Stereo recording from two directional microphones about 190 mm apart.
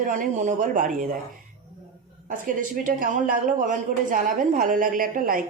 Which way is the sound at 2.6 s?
45° right (ahead or behind).